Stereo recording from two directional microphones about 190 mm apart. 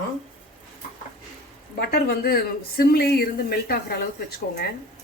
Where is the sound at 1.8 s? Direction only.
55° left (ahead or behind).